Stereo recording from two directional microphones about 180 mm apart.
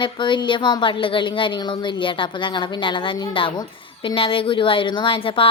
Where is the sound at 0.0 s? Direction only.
25° left (ahead or behind).